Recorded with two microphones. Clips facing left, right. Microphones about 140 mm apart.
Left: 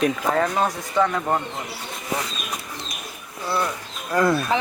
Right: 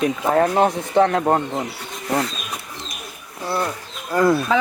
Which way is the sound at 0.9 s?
65° right (ahead or behind).